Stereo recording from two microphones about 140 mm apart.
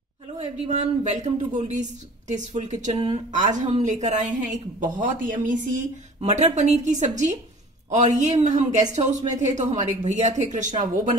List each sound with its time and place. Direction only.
0.7 s a woman's voice: 60° right (ahead or behind)